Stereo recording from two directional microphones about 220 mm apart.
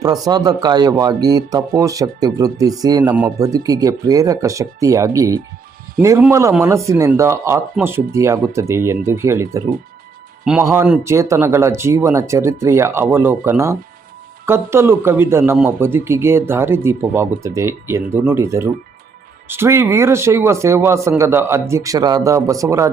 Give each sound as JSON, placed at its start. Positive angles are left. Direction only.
{"t": 0.0, "sound": "speech", "side_deg": -15}